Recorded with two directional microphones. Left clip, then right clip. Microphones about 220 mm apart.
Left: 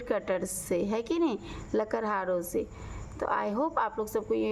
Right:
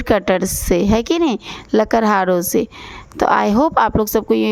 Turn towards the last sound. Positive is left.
turn(degrees=-45)  # may be behind; listen again after turning